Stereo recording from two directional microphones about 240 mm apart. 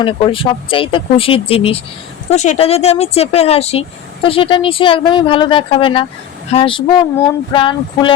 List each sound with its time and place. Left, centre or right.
0.0 s speech: left